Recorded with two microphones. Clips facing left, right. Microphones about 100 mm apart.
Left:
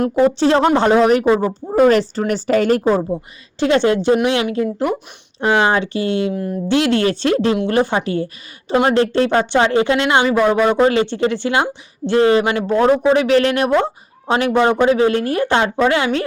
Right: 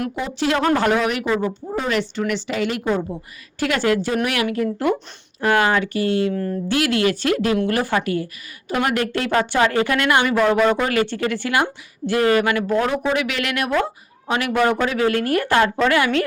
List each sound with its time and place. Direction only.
0.3 s speech: 30° left (ahead or behind)